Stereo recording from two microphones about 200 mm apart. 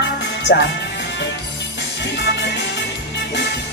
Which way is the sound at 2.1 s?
60° left (ahead or behind).